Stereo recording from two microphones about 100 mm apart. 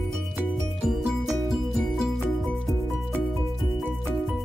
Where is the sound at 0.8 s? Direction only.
5° right (ahead or behind).